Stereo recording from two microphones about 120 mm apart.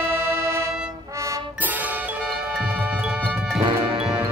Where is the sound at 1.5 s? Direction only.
15° right (ahead or behind).